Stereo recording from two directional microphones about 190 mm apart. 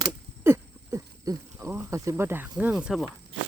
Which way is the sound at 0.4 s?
15° right (ahead or behind).